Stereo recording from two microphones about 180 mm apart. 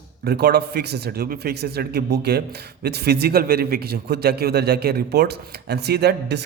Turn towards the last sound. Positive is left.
turn(degrees=-65)  # may be behind; listen again after turning